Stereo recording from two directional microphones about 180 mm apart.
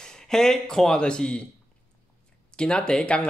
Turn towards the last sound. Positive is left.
turn(degrees=5)  # may be behind; listen again after turning